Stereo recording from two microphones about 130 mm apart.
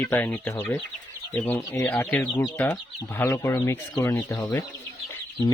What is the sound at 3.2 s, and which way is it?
Chicken, 20° left (ahead or behind).